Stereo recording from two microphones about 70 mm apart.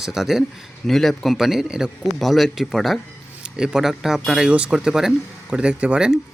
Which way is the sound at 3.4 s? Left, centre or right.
Centre.